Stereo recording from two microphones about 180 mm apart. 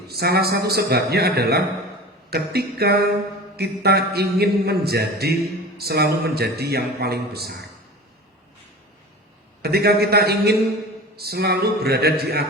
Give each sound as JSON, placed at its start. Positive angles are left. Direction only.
{"t": 0.1, "sound": "a man's voice", "side_deg": -60}
{"t": 9.6, "sound": "a man's voice", "side_deg": -60}